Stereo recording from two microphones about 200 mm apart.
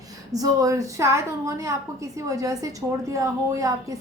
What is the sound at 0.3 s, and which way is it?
A woman's voice, 20° right (ahead or behind).